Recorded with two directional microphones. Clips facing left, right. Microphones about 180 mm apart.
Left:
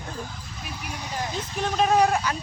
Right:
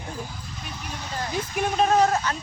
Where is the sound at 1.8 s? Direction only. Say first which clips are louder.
Even; 10° left (ahead or behind).